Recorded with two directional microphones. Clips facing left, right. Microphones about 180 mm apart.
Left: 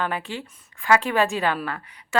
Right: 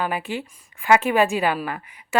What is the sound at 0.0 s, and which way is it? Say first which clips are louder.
Speech: right 2 dB; 15° right (ahead or behind).